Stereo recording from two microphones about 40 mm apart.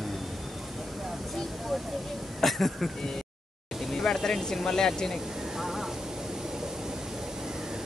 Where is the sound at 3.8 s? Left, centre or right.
Centre.